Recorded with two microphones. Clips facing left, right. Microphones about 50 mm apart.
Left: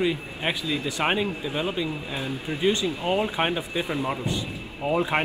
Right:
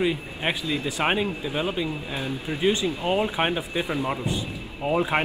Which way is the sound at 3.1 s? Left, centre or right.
Centre.